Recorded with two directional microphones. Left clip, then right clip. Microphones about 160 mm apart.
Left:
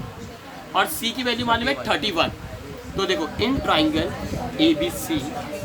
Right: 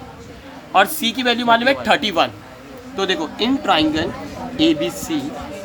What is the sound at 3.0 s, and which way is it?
A man's voice, 45° right (ahead or behind).